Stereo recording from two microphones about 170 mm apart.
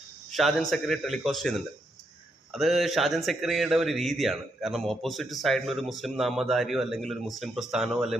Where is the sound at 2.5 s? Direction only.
Centre (ahead or behind).